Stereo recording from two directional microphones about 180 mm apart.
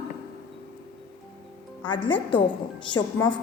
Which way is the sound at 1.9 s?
25° left (ahead or behind).